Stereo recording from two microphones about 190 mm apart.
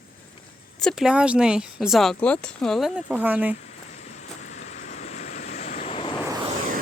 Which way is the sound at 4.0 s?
40° left (ahead or behind).